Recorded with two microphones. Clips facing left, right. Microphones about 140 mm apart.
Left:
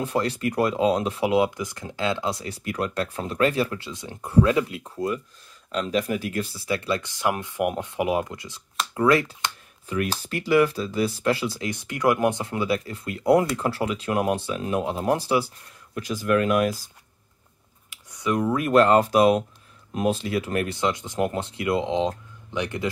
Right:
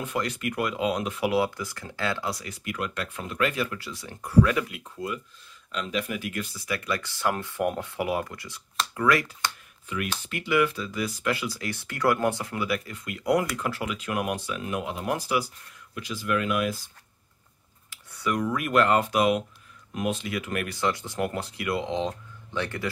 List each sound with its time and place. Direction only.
0.0 s speech: 35° left (ahead or behind)
1.3 s speech: 20° left (ahead or behind)
15.9 s speech: 45° left (ahead or behind)
17.8 s speech: 20° left (ahead or behind)